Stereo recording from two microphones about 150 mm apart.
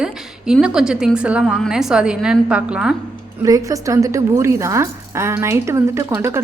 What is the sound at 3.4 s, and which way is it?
A woman's voice, 20° right (ahead or behind).